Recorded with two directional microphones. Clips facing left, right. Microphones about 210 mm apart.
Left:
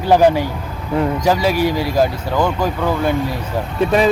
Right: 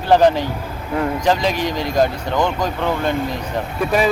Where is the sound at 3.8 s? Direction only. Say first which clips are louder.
Left 5 dB; 25° left (ahead or behind).